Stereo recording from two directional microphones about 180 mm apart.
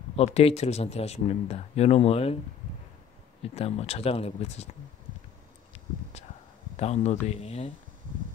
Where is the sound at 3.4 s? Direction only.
35° left (ahead or behind).